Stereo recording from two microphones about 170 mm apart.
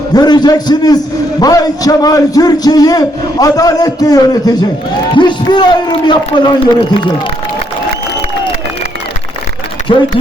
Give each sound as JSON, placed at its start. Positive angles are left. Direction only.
{"t": 0.1, "sound": "a man's voice", "side_deg": 25}